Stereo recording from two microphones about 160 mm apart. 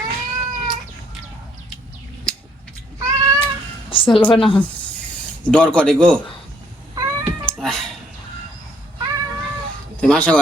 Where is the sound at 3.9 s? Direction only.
35° left (ahead or behind).